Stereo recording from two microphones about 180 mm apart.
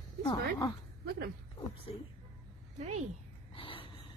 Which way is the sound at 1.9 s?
30° left (ahead or behind).